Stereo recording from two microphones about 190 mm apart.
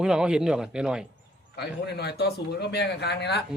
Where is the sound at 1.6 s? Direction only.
60° left (ahead or behind).